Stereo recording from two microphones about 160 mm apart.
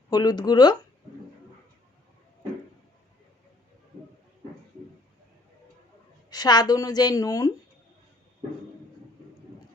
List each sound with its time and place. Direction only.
0.1 s a woman's voice: 25° left (ahead or behind)
6.3 s a woman's voice: 25° left (ahead or behind)